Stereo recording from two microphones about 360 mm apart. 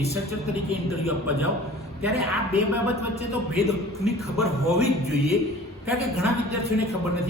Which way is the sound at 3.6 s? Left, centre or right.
Centre.